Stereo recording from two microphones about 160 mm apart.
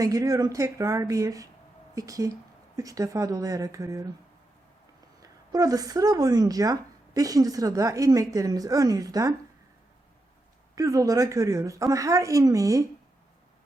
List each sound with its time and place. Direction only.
0.0 s a woman's voice: 20° right (ahead or behind)
5.2 s a woman's voice: 20° right (ahead or behind)
10.8 s a woman's voice: 20° right (ahead or behind)